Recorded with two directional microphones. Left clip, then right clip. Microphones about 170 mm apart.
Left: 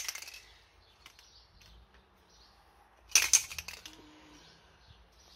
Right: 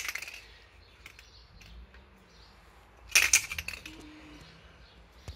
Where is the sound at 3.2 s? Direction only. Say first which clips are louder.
Right 3 dB; 5° right (ahead or behind).